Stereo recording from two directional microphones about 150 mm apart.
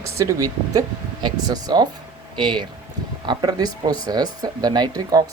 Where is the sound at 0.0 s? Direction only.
20° right (ahead or behind).